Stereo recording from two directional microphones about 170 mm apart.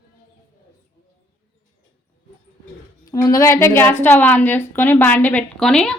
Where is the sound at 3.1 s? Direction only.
20° left (ahead or behind); by 6.0 s 5° left (ahead or behind).